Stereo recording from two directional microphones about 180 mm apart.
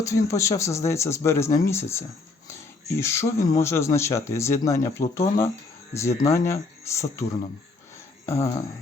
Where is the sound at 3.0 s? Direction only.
15° left (ahead or behind).